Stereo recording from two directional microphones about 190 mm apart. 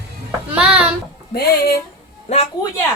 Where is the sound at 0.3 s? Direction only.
5° right (ahead or behind).